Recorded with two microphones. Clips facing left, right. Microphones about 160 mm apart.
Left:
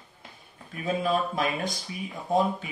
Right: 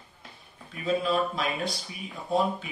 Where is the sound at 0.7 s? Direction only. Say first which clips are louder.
Even; 50° left (ahead or behind).